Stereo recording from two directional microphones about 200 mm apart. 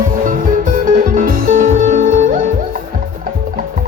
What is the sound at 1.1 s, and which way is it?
Music, 45° right (ahead or behind).